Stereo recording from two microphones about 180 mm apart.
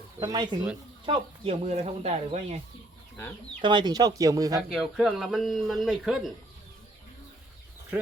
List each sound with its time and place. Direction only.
0.2 s speech: 20° right (ahead or behind)
1.0 s speech: 30° right (ahead or behind)
3.6 s speech: 25° right (ahead or behind)
4.7 s speech: 5° right (ahead or behind)